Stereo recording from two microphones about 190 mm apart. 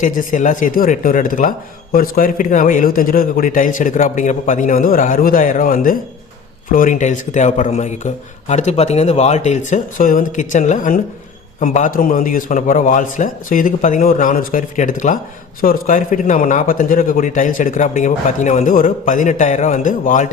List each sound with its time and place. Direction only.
0.0 s speech: 45° left (ahead or behind)